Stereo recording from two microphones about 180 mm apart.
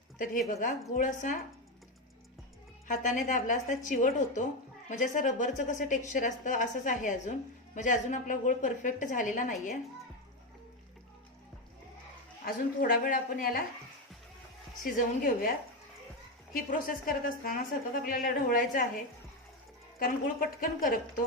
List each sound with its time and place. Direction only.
0.5 s speech: 45° left (ahead or behind)
2.8 s speech: 45° left (ahead or behind)
12.5 s speech: 50° left (ahead or behind)
14.8 s speech: 50° left (ahead or behind)
20.0 s a woman's voice: 50° left (ahead or behind)